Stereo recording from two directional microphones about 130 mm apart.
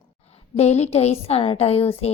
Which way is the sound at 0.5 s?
55° left (ahead or behind).